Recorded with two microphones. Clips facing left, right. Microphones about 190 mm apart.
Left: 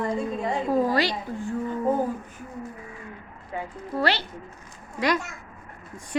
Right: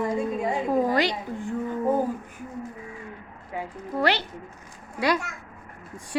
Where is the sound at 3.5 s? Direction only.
15° right (ahead or behind).